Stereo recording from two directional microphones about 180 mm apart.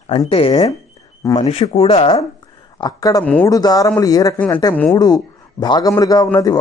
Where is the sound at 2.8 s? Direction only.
20° left (ahead or behind).